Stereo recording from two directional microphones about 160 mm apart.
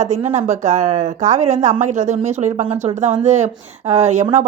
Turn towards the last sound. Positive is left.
turn(degrees=-45)  # may be behind; listen again after turning